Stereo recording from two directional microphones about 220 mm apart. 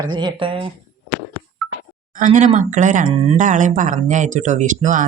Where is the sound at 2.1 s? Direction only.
35° right (ahead or behind).